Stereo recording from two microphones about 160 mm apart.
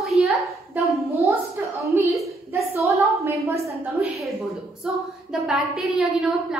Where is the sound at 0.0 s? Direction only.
Centre (ahead or behind).